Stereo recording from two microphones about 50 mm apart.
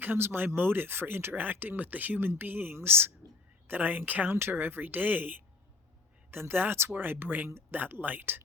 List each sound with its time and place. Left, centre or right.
0.0 s speech: right
6.3 s speech: right